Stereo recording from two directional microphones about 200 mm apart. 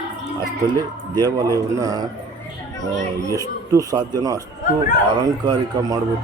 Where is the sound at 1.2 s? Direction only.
20° right (ahead or behind).